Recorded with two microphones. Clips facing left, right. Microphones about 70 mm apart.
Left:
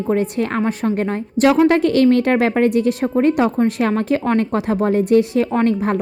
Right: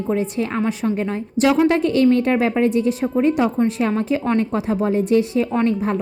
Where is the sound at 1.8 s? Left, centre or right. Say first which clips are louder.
Left 2 dB; left.